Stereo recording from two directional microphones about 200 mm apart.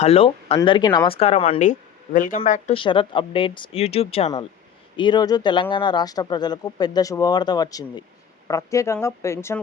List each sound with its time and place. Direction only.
0.0 s speech: 30° left (ahead or behind)
2.1 s speech: 40° left (ahead or behind)
2.7 s speech: 25° left (ahead or behind)